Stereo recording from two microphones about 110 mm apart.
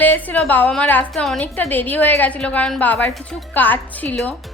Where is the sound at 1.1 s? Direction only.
5° left (ahead or behind).